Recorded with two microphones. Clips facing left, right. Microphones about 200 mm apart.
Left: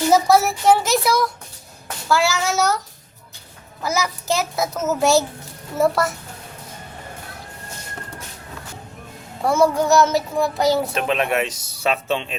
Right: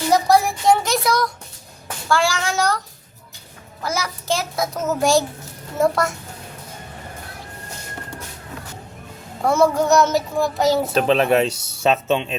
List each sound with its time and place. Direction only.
0.1 s child singing: 5° left (ahead or behind)
3.8 s child singing: centre (ahead or behind)
9.4 s child singing: centre (ahead or behind)
10.9 s speech: 35° right (ahead or behind)